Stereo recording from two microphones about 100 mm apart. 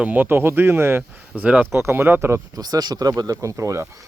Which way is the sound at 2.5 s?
40° right (ahead or behind).